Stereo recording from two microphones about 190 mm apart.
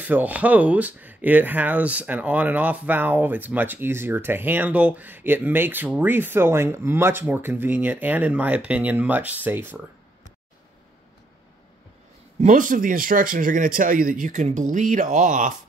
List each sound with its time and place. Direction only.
0.0 s speech: 10° right (ahead or behind)
12.4 s a man's voice: 45° right (ahead or behind)